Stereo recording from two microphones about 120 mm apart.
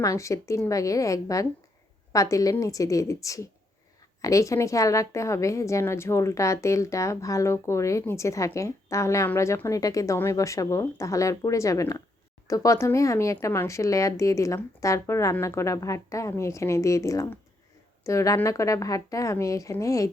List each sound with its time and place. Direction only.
0.0 s a woman's voice: 25° left (ahead or behind)